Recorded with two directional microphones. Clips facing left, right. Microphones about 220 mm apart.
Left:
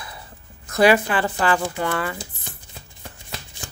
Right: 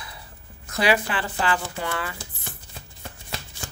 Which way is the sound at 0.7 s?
50° left (ahead or behind).